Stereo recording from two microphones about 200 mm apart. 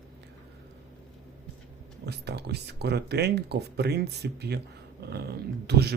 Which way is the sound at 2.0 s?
55° right (ahead or behind).